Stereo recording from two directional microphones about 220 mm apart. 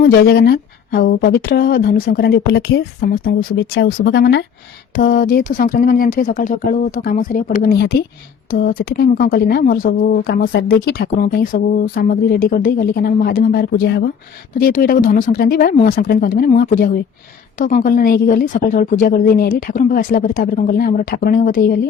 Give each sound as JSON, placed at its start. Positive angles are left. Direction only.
{"t": 0.0, "sound": "a woman's voice", "side_deg": 45}